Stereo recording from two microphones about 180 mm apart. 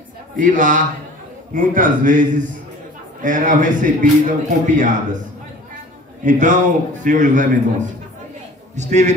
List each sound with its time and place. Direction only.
0.4 s a man's voice: 45° right (ahead or behind)
6.2 s a man's voice: 45° right (ahead or behind)